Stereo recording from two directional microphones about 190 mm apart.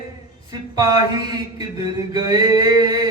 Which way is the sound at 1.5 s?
20° right (ahead or behind).